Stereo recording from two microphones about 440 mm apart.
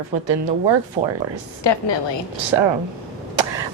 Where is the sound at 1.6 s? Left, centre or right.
Left.